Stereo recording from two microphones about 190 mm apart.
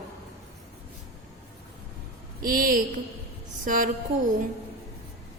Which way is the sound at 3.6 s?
45° right (ahead or behind).